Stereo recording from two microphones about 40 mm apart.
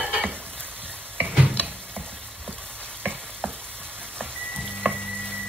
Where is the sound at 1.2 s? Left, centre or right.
Right.